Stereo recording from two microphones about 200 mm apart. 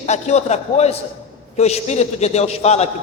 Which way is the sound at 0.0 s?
35° left (ahead or behind).